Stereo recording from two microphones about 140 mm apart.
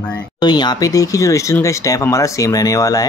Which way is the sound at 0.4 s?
30° left (ahead or behind).